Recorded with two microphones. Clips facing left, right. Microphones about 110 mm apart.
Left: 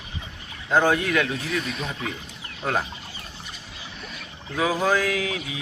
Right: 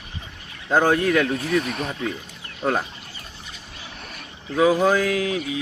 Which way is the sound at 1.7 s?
55° right (ahead or behind).